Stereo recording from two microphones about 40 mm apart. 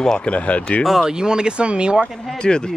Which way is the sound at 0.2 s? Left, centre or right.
Left.